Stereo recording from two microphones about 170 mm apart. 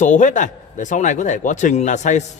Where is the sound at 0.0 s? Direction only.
45° left (ahead or behind).